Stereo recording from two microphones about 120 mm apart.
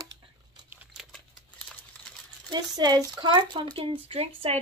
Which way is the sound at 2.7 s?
35° right (ahead or behind).